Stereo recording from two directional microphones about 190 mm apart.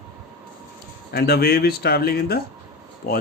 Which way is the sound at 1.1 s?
55° left (ahead or behind).